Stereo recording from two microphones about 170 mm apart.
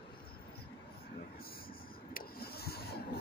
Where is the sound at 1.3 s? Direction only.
60° left (ahead or behind).